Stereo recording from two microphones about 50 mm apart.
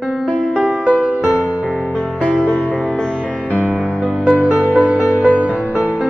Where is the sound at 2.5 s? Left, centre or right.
Left.